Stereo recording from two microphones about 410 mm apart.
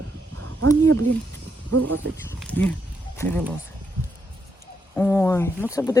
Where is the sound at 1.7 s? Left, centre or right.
Right.